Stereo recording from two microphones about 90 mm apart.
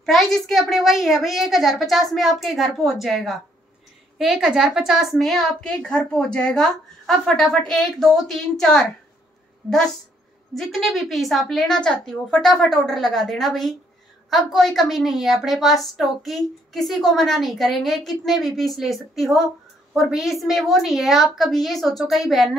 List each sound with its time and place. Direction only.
0.0 s a woman's voice: centre (ahead or behind)
10.5 s a woman's voice: centre (ahead or behind)